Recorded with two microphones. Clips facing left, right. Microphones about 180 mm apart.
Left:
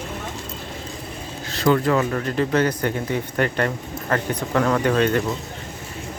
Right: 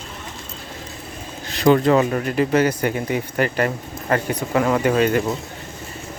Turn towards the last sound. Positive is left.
turn(degrees=-5)  # may be behind; listen again after turning